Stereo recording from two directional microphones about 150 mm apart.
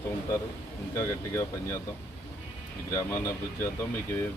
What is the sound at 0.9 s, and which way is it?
Speech, 20° left (ahead or behind).